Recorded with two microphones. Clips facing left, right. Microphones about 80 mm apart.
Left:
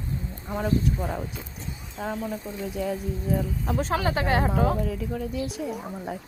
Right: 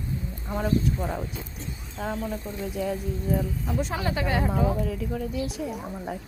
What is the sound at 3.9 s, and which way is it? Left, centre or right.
Speech, left.